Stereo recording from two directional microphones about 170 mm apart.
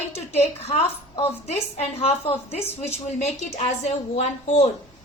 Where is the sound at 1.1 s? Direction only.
35° left (ahead or behind).